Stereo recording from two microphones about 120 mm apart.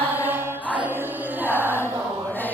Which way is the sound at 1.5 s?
15° right (ahead or behind).